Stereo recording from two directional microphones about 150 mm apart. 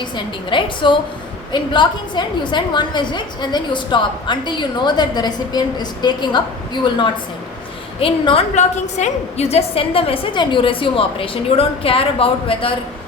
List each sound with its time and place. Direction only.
0.5 s a woman's voice: 35° left (ahead or behind)